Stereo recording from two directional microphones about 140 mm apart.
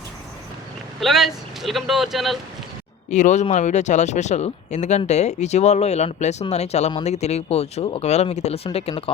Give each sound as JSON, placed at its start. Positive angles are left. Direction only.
{"t": 0.9, "sound": "speech", "side_deg": 0}
{"t": 3.1, "sound": "speech", "side_deg": 60}